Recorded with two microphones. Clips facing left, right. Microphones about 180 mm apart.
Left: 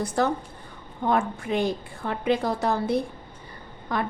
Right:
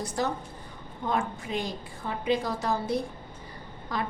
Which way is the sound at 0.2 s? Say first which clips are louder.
Left 5 dB; 60° left (ahead or behind).